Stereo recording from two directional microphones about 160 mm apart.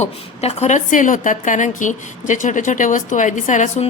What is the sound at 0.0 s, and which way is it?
A woman's voice, 45° left (ahead or behind).